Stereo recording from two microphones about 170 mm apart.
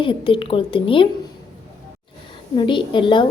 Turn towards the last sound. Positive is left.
turn(degrees=30)  # may be behind; listen again after turning